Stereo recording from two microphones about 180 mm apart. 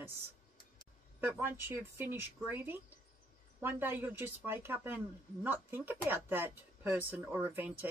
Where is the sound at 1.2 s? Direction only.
10° right (ahead or behind).